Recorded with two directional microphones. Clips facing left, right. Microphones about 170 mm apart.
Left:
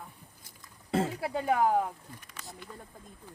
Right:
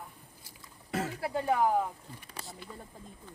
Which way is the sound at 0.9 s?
30° left (ahead or behind).